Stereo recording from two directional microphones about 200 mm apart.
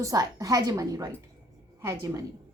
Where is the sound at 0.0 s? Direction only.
15° right (ahead or behind).